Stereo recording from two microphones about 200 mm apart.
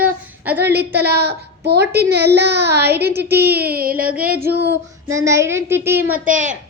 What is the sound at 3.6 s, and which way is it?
Child singing, 45° right (ahead or behind).